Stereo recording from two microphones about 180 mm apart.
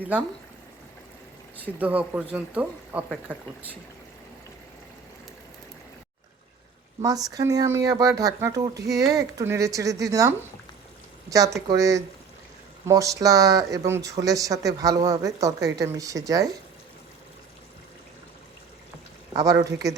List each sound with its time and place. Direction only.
1.8 s speech: 10° right (ahead or behind)
7.0 s speech: 20° right (ahead or behind)
19.3 s speech: 20° right (ahead or behind)